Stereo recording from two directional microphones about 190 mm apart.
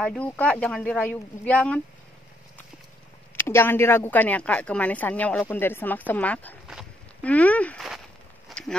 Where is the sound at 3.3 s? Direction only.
15° left (ahead or behind).